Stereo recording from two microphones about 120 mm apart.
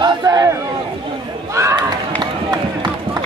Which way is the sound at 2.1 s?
35° right (ahead or behind).